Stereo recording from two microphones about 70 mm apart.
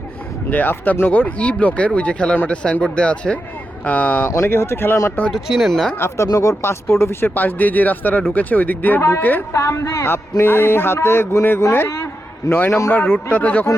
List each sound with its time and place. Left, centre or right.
0.5 s speech: left
4.4 s a man's voice: left
5.3 s speech: centre
6.2 s a man's voice: left
7.3 s speech: left
9.0 s a man's voice: left